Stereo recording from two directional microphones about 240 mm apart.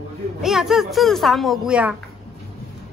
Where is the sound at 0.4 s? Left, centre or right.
Centre.